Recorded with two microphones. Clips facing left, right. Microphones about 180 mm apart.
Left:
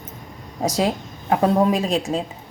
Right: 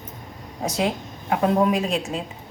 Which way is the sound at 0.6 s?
40° left (ahead or behind).